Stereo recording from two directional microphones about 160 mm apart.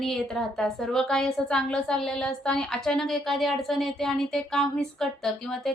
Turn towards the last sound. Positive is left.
turn(degrees=0)  # may be behind; listen again after turning